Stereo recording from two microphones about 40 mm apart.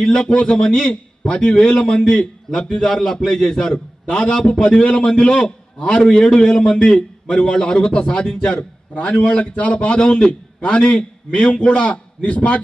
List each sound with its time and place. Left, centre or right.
0.5 s a man's voice: left
9.9 s a man's voice: left